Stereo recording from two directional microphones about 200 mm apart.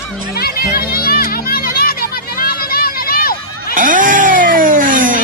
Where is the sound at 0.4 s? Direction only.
50° left (ahead or behind).